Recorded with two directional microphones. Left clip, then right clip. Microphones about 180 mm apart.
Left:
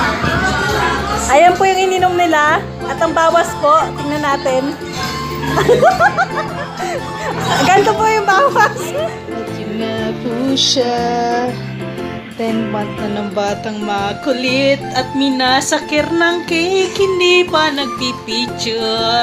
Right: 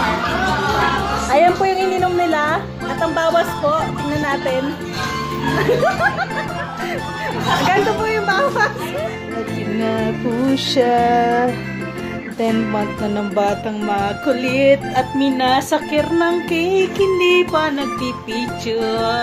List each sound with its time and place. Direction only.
1.3 s music: centre (ahead or behind)
7.6 s music: centre (ahead or behind)
9.8 s music: 10° right (ahead or behind)
10.5 s music: 45° right (ahead or behind)
10.8 s music: 10° right (ahead or behind)
12.7 s music: 10° right (ahead or behind)